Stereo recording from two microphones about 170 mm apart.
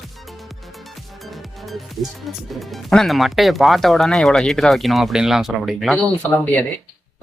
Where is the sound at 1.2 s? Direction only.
Centre (ahead or behind).